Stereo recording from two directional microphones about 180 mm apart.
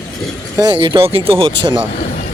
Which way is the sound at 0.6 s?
25° right (ahead or behind).